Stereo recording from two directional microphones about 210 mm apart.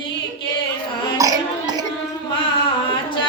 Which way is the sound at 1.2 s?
15° right (ahead or behind).